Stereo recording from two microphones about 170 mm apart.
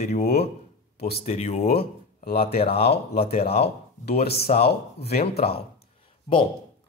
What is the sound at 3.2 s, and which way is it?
Speech, 35° left (ahead or behind).